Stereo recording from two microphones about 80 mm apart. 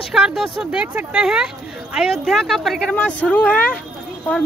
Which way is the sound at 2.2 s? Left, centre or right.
Centre.